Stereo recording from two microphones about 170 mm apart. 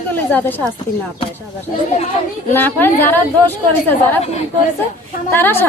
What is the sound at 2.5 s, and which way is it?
A woman's voice, 10° left (ahead or behind).